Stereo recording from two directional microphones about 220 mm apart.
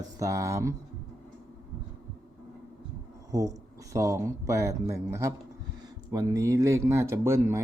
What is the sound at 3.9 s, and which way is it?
Speech, 15° right (ahead or behind).